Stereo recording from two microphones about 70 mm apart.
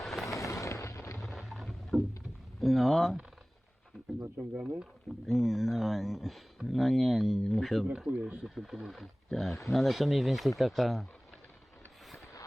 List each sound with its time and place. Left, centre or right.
0.0 s a sound: centre
0.3 s artillery fire: left
1.3 s a sound: centre
2.6 s speech: centre
5.2 s speech: centre
8.1 s speech: centre
8.4 s speech: centre
12.0 s vehicle: centre